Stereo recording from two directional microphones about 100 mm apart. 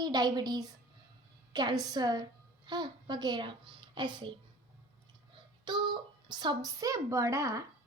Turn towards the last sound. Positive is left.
turn(degrees=-30)  # may be behind; listen again after turning